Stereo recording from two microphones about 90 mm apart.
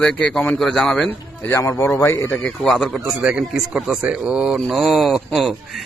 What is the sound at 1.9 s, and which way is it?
Speech, 35° left (ahead or behind).